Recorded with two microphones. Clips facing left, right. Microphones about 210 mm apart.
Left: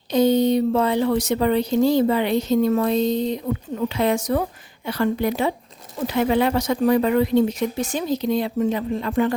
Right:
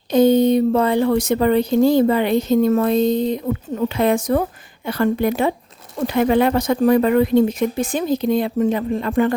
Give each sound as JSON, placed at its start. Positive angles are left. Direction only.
{"t": 0.1, "sound": "speech", "side_deg": -50}